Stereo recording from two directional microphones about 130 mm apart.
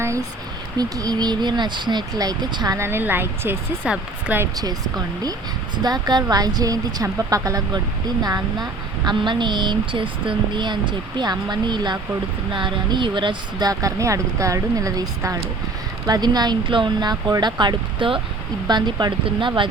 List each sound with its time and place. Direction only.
0.8 s speech: 30° right (ahead or behind)
2.7 s speech: 20° right (ahead or behind)
4.5 s speech: 30° right (ahead or behind)